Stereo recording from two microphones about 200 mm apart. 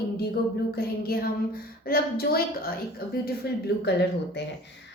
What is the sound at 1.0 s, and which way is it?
A woman's voice, 50° left (ahead or behind).